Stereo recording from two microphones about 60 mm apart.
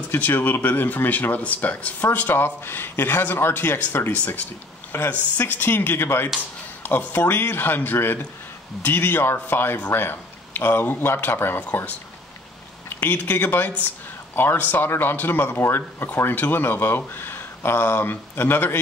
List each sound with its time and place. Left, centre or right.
0.1 s speech: left
13.0 s speech: left